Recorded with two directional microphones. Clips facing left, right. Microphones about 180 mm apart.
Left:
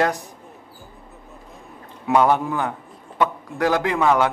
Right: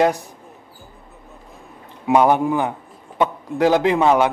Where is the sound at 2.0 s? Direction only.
15° right (ahead or behind).